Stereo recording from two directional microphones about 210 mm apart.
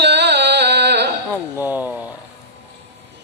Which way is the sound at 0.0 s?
55° right (ahead or behind).